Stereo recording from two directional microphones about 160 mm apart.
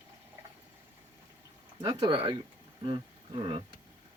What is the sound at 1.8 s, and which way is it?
Speech, 30° right (ahead or behind).